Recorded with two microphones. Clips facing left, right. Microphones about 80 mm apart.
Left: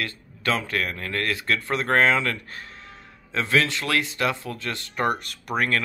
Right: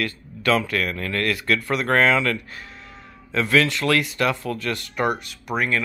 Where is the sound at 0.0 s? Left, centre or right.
Left.